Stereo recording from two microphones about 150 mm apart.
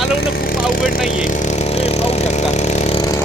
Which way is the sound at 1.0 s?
55° left (ahead or behind).